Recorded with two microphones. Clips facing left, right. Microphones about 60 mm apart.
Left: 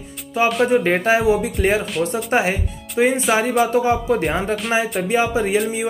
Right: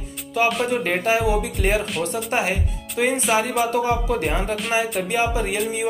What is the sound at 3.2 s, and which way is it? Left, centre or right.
Speech, centre.